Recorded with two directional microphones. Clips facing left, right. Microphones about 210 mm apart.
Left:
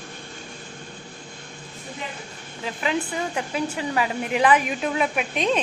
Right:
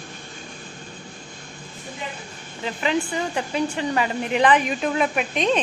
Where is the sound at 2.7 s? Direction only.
5° left (ahead or behind).